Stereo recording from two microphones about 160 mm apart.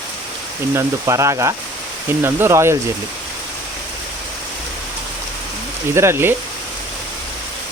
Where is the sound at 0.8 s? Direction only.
20° right (ahead or behind).